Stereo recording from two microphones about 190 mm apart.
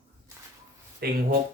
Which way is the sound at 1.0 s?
55° right (ahead or behind).